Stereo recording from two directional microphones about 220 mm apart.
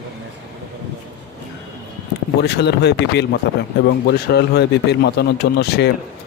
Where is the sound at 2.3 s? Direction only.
50° left (ahead or behind).